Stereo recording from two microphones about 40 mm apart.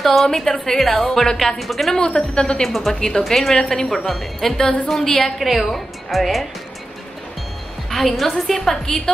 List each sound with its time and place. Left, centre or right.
0.0 s a woman's voice: centre
0.3 s a woman's voice: centre
2.0 s a woman's voice: left
2.6 s a woman's voice: centre
3.9 s a woman's voice: centre
7.9 s a woman's voice: centre